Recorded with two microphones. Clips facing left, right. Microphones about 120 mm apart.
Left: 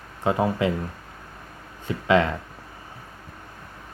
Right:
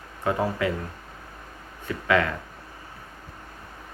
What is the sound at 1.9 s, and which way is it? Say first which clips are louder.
Speech: left 3 dB; 25° left (ahead or behind).